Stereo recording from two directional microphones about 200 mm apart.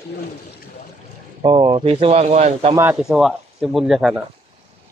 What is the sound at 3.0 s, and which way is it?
Speech, centre (ahead or behind).